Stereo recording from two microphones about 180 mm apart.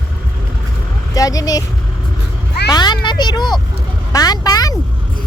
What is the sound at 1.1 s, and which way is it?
Speech, 20° left (ahead or behind).